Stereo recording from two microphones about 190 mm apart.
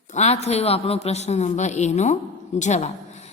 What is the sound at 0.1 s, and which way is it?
A woman's voice, 35° left (ahead or behind).